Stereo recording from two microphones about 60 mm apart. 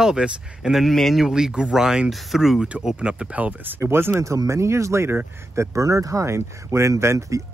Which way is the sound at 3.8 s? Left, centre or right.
Right.